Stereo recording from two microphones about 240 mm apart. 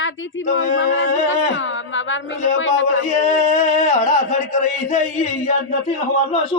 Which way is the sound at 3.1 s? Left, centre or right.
Left.